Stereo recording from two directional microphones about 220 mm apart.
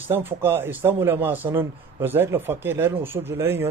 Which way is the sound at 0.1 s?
10° right (ahead or behind).